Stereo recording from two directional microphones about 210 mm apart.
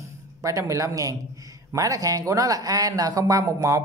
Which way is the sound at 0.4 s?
15° right (ahead or behind).